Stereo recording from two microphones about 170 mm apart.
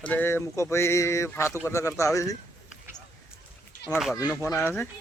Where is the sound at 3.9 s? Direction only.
Centre (ahead or behind).